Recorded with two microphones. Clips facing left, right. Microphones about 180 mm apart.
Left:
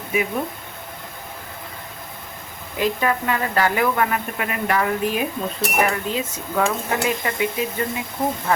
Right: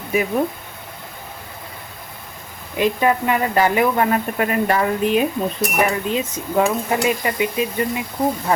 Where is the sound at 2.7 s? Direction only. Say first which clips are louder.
Right 4 dB; 20° right (ahead or behind).